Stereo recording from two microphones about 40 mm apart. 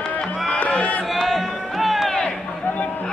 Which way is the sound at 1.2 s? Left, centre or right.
Centre.